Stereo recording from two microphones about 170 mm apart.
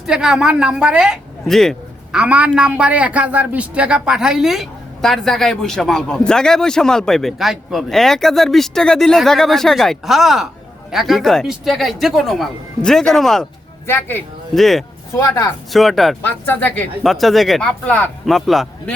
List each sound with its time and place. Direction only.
0.0 s a woman's voice: 5° right (ahead or behind)
13.8 s speech: 15° left (ahead or behind)
14.5 s a woman's voice: centre (ahead or behind)
15.1 s speech: 20° left (ahead or behind)
15.7 s a woman's voice: centre (ahead or behind)